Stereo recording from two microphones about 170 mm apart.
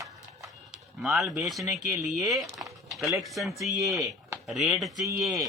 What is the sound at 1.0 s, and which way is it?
Speech, centre (ahead or behind).